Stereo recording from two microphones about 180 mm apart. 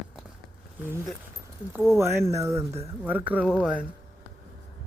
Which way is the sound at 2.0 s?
15° right (ahead or behind).